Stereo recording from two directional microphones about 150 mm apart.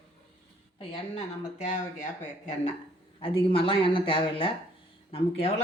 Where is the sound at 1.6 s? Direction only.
50° left (ahead or behind).